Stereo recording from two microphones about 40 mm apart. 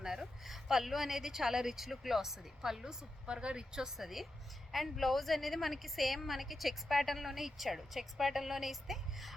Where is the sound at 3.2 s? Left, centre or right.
Right; by 9.3 s centre.